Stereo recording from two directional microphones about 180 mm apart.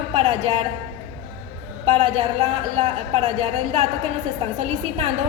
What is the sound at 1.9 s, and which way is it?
A woman's voice, 35° right (ahead or behind).